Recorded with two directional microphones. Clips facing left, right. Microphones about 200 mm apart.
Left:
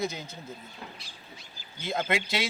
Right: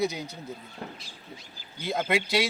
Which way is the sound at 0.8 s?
50° right (ahead or behind).